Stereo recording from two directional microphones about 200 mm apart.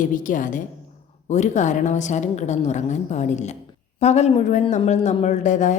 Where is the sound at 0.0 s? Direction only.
40° left (ahead or behind).